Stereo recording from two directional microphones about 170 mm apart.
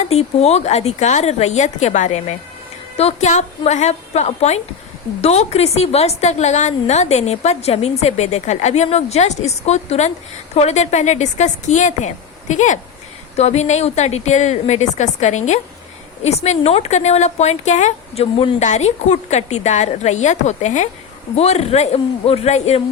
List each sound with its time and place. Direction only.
0.0 s a woman's voice: 40° left (ahead or behind)